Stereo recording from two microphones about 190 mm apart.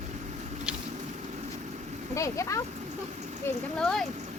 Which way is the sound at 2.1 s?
15° left (ahead or behind).